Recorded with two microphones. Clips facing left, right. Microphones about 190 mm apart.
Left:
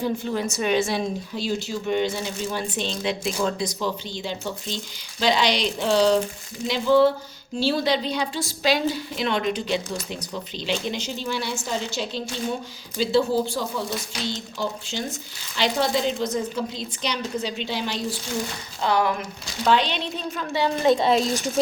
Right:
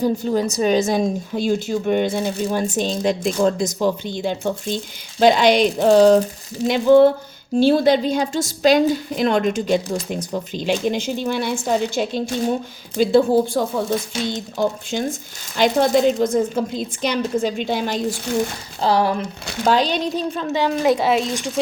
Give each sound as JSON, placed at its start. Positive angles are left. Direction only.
{"t": 0.0, "sound": "speech", "side_deg": -40}
{"t": 18.8, "sound": "a woman's voice", "side_deg": -35}
{"t": 20.5, "sound": "speech", "side_deg": -15}